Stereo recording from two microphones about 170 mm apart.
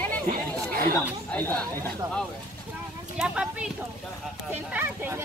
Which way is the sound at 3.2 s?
5° right (ahead or behind).